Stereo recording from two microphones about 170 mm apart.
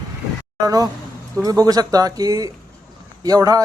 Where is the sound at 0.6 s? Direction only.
20° right (ahead or behind).